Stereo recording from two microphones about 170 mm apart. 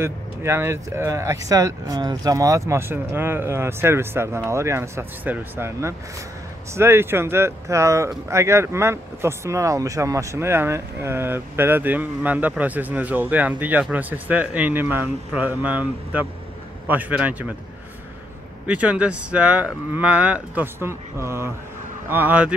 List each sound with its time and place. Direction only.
0.0 s speech: 15° right (ahead or behind)
18.7 s speech: 5° right (ahead or behind)